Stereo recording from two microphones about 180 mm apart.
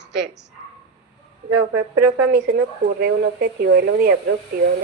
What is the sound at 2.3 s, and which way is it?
Speech, 60° right (ahead or behind).